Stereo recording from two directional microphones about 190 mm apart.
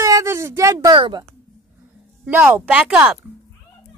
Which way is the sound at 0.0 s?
15° right (ahead or behind).